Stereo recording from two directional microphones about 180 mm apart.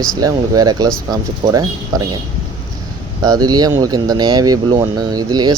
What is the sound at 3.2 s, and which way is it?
Speech, 20° right (ahead or behind).